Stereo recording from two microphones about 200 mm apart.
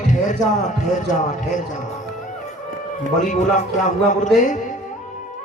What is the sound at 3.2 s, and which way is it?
Speech, 40° left (ahead or behind).